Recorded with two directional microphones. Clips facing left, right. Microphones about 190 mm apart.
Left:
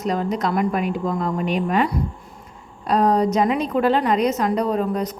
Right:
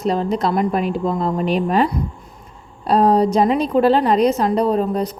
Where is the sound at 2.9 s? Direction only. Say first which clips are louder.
Right 3 dB; 30° right (ahead or behind).